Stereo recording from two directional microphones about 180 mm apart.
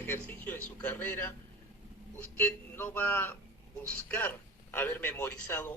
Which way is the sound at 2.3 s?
10° left (ahead or behind).